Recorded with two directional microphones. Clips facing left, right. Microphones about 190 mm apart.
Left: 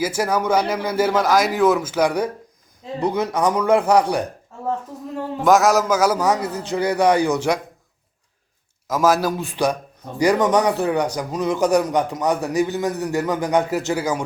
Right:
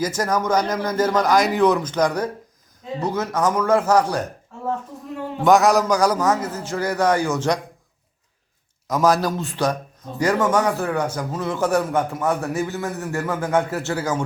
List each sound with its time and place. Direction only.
0.0 s a man's voice: 10° left (ahead or behind)
5.4 s a man's voice: centre (ahead or behind)
8.9 s a man's voice: 5° left (ahead or behind)